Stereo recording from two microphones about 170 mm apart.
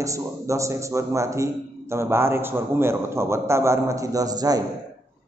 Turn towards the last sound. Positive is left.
turn(degrees=-20)  # may be behind; listen again after turning